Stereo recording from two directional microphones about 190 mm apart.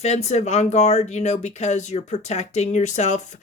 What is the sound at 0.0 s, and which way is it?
Speech, 35° left (ahead or behind).